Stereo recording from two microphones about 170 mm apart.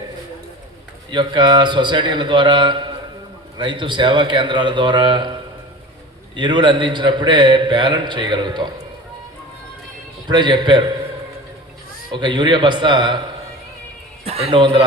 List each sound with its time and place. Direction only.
1.1 s a man's voice: 25° right (ahead or behind)
10.2 s a man's voice: 25° right (ahead or behind)
12.1 s a man's voice: 30° right (ahead or behind)
14.3 s a man's voice: 35° right (ahead or behind)